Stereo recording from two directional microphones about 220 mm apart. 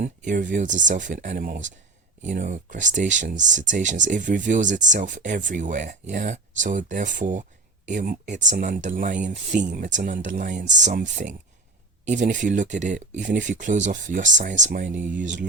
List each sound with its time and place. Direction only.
0.0 s speech: 35° right (ahead or behind)